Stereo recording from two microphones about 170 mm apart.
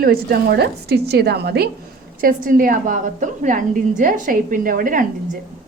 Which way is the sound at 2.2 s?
55° right (ahead or behind).